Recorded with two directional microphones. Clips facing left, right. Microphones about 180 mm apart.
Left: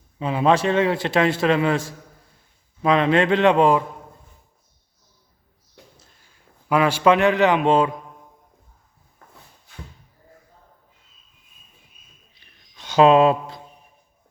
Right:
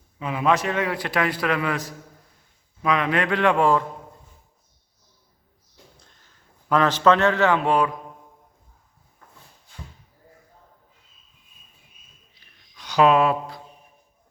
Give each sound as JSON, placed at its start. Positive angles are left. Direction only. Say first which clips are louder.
{"t": 0.2, "sound": "a man's voice", "louder": "left 3 dB", "side_deg": 30}
{"t": 6.0, "sound": "a sound", "louder": "left 1 dB", "side_deg": 5}
{"t": 12.7, "sound": "speech", "louder": "left 4 dB", "side_deg": 25}